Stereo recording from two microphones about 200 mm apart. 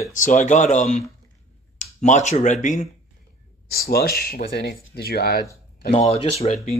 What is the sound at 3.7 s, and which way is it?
Speech, 50° left (ahead or behind).